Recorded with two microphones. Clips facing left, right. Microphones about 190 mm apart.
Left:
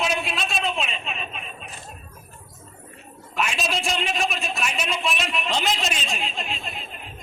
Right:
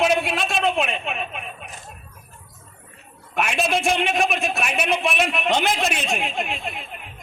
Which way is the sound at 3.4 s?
60° right (ahead or behind).